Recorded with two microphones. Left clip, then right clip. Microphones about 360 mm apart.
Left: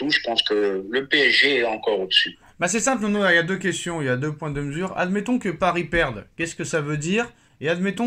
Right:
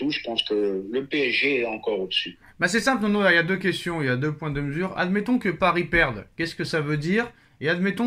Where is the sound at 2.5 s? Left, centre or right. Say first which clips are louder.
Right 1 dB; centre.